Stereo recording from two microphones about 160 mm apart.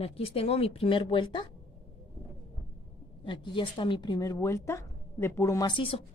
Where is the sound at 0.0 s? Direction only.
40° left (ahead or behind).